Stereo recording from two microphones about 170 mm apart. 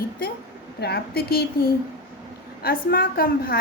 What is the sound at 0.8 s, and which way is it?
Speech, 65° left (ahead or behind).